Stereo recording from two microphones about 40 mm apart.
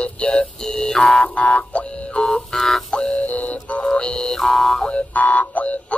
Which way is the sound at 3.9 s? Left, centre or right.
Centre.